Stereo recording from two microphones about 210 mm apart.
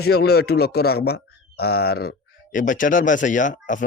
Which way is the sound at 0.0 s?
50° left (ahead or behind).